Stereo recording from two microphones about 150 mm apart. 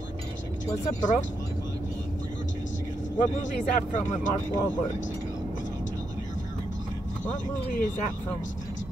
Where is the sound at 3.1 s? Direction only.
55° left (ahead or behind).